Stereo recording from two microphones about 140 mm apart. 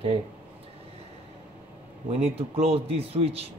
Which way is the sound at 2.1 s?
50° right (ahead or behind).